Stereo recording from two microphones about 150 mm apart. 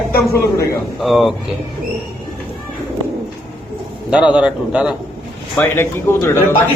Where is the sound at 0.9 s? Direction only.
Centre (ahead or behind).